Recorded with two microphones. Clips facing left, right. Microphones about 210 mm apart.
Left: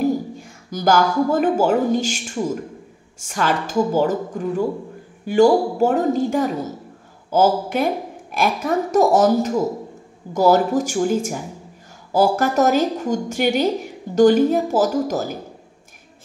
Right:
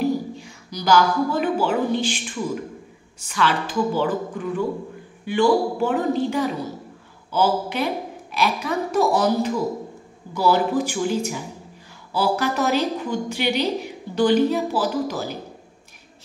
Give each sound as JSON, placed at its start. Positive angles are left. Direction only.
{"t": 0.0, "sound": "a woman's voice", "side_deg": 50}